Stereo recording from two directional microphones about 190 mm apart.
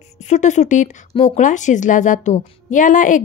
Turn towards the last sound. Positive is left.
turn(degrees=45)  # may be behind; listen again after turning